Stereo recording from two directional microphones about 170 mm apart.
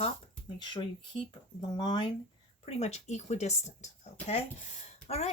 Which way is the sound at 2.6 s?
40° left (ahead or behind).